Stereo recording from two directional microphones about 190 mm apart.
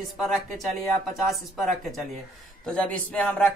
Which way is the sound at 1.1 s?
Centre (ahead or behind).